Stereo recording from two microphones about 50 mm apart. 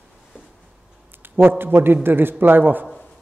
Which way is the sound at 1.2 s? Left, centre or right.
Right.